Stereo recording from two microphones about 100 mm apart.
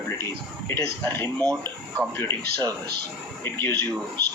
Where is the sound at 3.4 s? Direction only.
25° left (ahead or behind).